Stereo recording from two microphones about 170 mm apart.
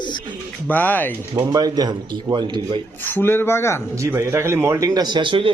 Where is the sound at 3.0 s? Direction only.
10° left (ahead or behind).